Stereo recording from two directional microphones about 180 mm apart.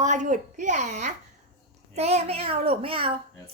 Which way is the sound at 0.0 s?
45° right (ahead or behind).